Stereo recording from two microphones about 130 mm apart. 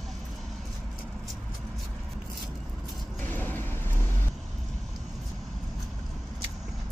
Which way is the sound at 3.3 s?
15° left (ahead or behind).